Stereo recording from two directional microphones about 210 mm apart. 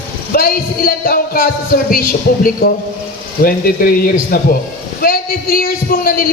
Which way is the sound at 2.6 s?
40° left (ahead or behind).